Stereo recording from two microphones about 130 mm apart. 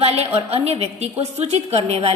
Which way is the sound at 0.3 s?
55° right (ahead or behind).